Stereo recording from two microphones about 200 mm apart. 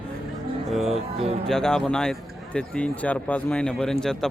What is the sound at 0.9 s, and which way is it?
Speech, 30° right (ahead or behind).